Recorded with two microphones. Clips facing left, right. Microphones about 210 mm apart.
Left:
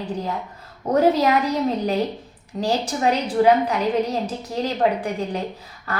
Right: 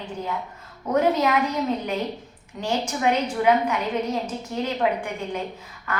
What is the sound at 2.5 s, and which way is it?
A woman's voice, 35° left (ahead or behind).